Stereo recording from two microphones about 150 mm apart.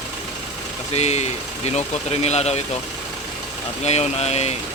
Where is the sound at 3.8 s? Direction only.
45° left (ahead or behind).